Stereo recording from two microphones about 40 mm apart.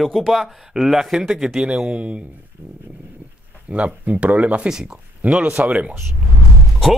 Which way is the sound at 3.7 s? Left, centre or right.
Right.